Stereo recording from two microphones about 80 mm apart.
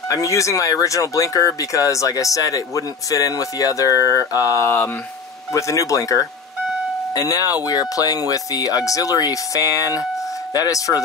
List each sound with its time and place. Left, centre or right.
0.1 s speech: left